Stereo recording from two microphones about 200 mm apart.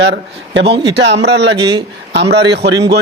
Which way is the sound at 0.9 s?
60° right (ahead or behind).